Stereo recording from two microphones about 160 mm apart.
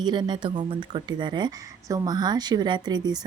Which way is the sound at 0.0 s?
25° right (ahead or behind).